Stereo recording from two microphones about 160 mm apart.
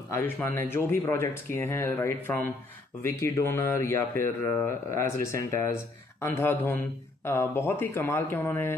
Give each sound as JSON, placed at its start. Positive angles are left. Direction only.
{"t": 0.1, "sound": "speech", "side_deg": 15}